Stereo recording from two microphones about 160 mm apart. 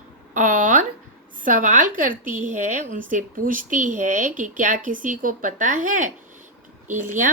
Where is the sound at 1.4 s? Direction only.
55° right (ahead or behind).